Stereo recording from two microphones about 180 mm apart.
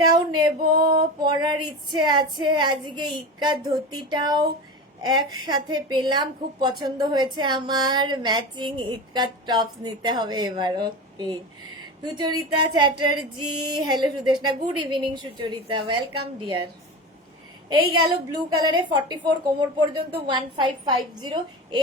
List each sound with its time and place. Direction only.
0.1 s female singing: 25° right (ahead or behind)
18.3 s female singing: 20° right (ahead or behind)